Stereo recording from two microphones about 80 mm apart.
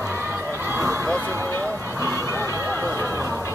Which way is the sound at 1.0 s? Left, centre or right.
Left.